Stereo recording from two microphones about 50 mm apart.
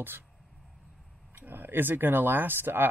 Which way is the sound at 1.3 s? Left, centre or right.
Right.